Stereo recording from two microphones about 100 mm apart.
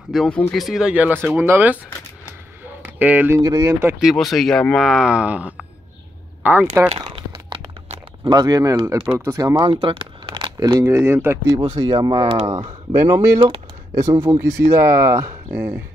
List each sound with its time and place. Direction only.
0.1 s speech: 5° left (ahead or behind); by 1.8 s 20° right (ahead or behind)
2.6 s a sound: 15° right (ahead or behind)
3.3 s speech: 35° right (ahead or behind)
4.0 s speech: centre (ahead or behind); by 6.9 s 20° right (ahead or behind)
7.1 s crunch: 60° right (ahead or behind)
8.3 s speech: 40° right (ahead or behind)
8.8 s speech: 20° right (ahead or behind)
9.2 s speech: 30° right (ahead or behind)
9.7 s speech: 55° right (ahead or behind)
10.6 s speech: 30° right (ahead or behind)
11.4 s speech: 50° right (ahead or behind); by 15.3 s 30° right (ahead or behind)
15.5 s speech: 20° right (ahead or behind)